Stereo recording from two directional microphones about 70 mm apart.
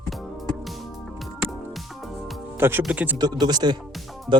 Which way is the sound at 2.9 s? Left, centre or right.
Centre.